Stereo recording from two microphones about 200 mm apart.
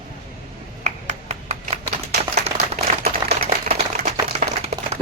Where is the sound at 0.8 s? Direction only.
35° right (ahead or behind).